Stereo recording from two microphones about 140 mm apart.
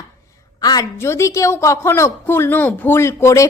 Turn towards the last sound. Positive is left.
turn(degrees=20)  # may be behind; listen again after turning